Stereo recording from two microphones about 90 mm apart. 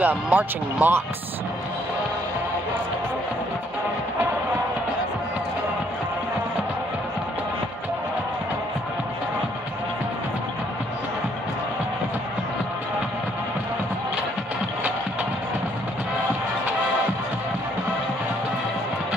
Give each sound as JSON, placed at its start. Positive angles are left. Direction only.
{"t": 0.0, "sound": "speech", "side_deg": -20}